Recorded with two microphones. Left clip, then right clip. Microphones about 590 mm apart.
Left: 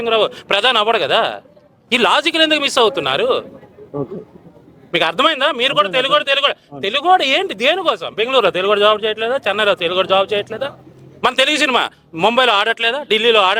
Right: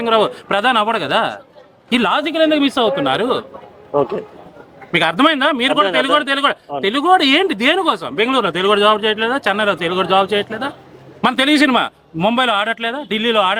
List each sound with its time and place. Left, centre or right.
0.0 s a man's voice: left
4.9 s a man's voice: left